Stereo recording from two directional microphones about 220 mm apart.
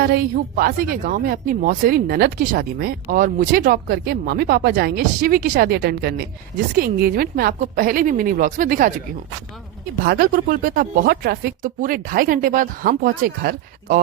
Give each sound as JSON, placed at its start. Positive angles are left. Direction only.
{"t": 0.0, "sound": "speech", "side_deg": -45}
{"t": 10.0, "sound": "speech", "side_deg": -40}